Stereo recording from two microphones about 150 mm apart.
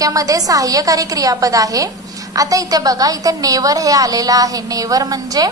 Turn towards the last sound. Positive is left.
turn(degrees=-25)  # may be behind; listen again after turning